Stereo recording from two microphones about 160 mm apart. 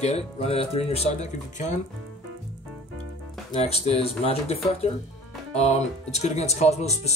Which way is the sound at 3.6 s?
40° left (ahead or behind).